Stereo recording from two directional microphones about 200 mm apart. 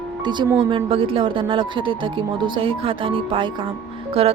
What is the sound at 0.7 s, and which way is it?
Speech, 25° right (ahead or behind).